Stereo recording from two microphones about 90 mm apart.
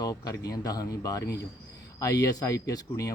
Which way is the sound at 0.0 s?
40° left (ahead or behind).